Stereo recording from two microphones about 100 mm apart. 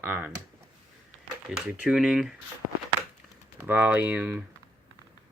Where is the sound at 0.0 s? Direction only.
20° right (ahead or behind).